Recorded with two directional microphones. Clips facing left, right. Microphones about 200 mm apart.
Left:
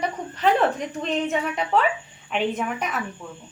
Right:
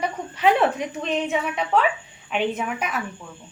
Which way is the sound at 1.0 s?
Centre (ahead or behind).